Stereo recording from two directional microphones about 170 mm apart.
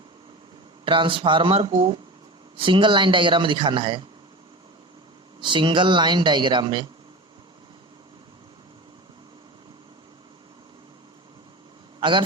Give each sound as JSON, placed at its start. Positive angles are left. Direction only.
{"t": 0.9, "sound": "speech", "side_deg": -30}
{"t": 5.4, "sound": "speech", "side_deg": -30}
{"t": 11.9, "sound": "a sound", "side_deg": -30}